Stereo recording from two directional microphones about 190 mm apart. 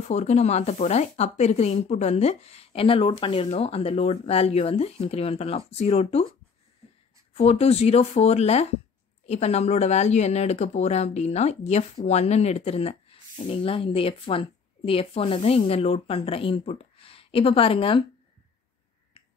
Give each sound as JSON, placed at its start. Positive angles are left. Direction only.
{"t": 0.1, "sound": "speech", "side_deg": 35}
{"t": 7.3, "sound": "speech", "side_deg": 35}